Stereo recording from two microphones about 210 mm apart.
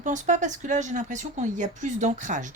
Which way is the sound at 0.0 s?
35° right (ahead or behind).